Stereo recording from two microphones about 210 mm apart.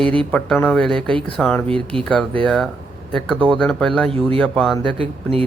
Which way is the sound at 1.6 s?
25° right (ahead or behind).